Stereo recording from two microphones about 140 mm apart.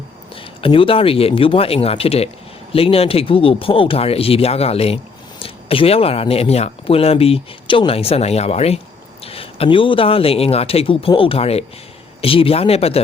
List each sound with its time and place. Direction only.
0.6 s speech: 40° left (ahead or behind)